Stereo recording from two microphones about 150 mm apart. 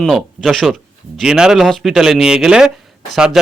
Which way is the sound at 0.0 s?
Centre (ahead or behind).